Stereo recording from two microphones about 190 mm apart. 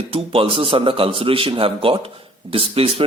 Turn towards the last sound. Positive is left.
turn(degrees=-30)  # may be behind; listen again after turning